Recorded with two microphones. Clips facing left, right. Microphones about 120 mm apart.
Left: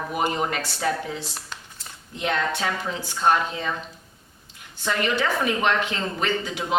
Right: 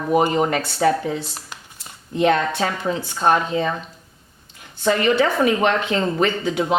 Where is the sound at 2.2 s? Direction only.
45° right (ahead or behind).